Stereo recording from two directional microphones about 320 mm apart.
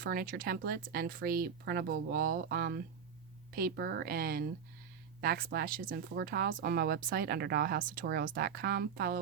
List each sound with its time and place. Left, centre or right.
0.0 s speech: right